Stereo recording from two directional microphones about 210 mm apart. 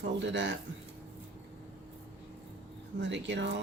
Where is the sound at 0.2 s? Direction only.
60° right (ahead or behind).